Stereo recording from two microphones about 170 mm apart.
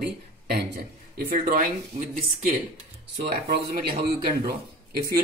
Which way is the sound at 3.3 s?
65° right (ahead or behind).